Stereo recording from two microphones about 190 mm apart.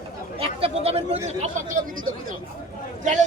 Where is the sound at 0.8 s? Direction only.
30° right (ahead or behind).